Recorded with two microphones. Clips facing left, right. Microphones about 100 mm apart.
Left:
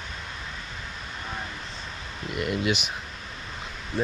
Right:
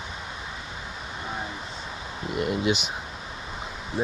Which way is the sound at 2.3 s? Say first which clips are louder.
Right 2 dB; 30° right (ahead or behind).